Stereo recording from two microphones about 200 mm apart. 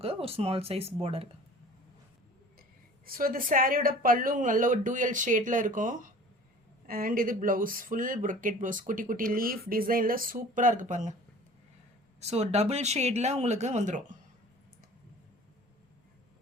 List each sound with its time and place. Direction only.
0.0 s speech: 30° right (ahead or behind)
3.1 s speech: 45° right (ahead or behind)
12.2 s speech: 30° right (ahead or behind)